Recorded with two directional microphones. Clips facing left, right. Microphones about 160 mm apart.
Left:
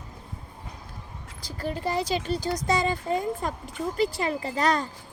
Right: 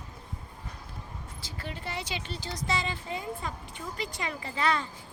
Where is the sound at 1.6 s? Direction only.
40° left (ahead or behind).